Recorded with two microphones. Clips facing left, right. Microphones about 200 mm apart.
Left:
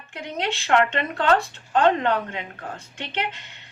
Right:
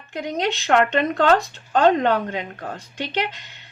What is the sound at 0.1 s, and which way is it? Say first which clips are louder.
Speech: right 4 dB; 40° right (ahead or behind).